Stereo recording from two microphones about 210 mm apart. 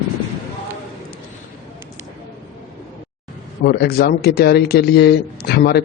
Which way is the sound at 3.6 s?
50° left (ahead or behind).